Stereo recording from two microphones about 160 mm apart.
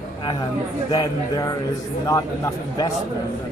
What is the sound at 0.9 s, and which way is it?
Speech, 25° left (ahead or behind).